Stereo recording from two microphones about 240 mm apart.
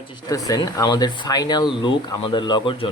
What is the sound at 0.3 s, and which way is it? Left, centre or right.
Speech, centre.